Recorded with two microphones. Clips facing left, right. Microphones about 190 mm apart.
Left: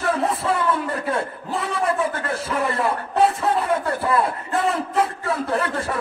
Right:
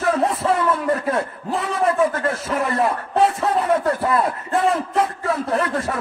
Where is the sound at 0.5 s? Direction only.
30° left (ahead or behind).